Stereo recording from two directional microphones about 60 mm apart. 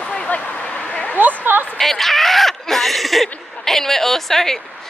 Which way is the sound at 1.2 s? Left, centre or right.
Right.